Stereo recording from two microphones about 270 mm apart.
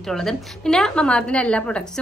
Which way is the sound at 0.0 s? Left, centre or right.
Centre.